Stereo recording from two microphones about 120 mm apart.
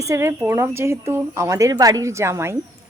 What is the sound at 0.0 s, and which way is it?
A woman's voice, 25° right (ahead or behind).